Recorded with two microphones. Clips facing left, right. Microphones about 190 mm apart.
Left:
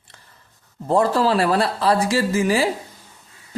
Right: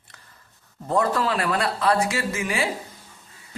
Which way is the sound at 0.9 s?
30° left (ahead or behind).